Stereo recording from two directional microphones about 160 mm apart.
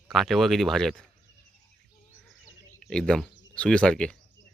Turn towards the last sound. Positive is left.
turn(degrees=5)  # may be behind; listen again after turning